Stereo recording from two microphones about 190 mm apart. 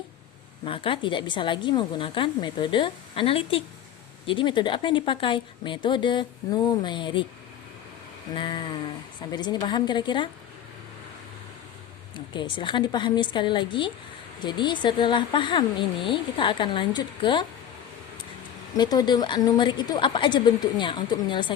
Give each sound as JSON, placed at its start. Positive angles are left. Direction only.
{"t": 0.6, "sound": "a woman's voice", "side_deg": 30}
{"t": 8.4, "sound": "a woman's voice", "side_deg": 25}
{"t": 12.1, "sound": "a woman's voice", "side_deg": 25}
{"t": 18.8, "sound": "a woman's voice", "side_deg": 20}